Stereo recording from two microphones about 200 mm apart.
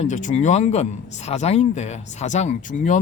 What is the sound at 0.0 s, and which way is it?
Speech, 40° left (ahead or behind).